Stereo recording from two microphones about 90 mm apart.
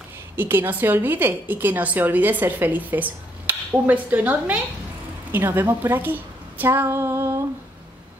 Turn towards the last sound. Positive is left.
turn(degrees=-30)  # may be behind; listen again after turning